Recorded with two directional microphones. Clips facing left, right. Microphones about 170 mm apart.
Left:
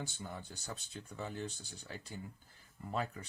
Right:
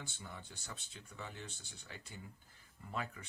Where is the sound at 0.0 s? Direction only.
40° left (ahead or behind).